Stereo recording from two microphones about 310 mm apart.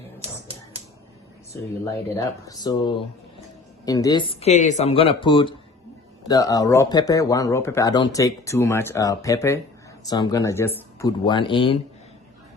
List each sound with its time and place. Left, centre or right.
1.5 s speech: centre